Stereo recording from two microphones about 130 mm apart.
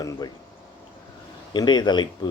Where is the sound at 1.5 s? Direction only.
35° left (ahead or behind).